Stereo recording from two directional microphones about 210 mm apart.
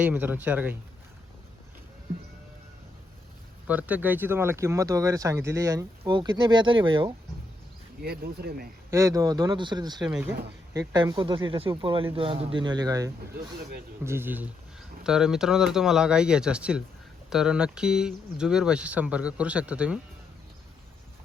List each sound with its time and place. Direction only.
0.0 s speech: 10° right (ahead or behind)
3.7 s speech: 10° right (ahead or behind); by 7.1 s 25° right (ahead or behind)
8.0 s speech: 45° right (ahead or behind)
8.9 s speech: 15° right (ahead or behind)
10.1 s speech: 5° right (ahead or behind)
10.8 s speech: 20° right (ahead or behind)